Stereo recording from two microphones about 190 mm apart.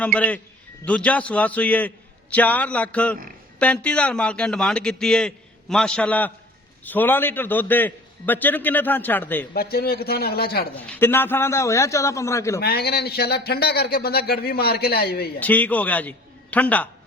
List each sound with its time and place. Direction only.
0.0 s a man's voice: 5° left (ahead or behind)
9.6 s speech: 55° left (ahead or behind)
10.9 s a man's voice: 10° left (ahead or behind)
12.5 s speech: 55° left (ahead or behind)
15.4 s a man's voice: 10° left (ahead or behind)